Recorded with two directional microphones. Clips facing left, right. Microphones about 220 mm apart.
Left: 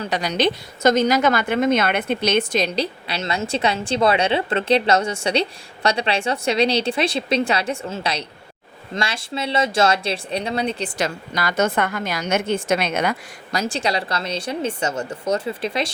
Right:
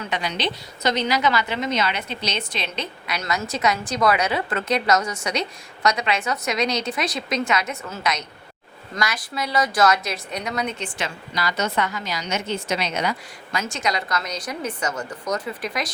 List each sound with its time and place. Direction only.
0.0 s a woman's voice: 40° left (ahead or behind)
13.5 s speech: 35° left (ahead or behind)